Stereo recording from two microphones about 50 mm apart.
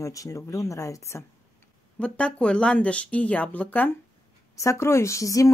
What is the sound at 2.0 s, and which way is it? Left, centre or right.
Speech, left.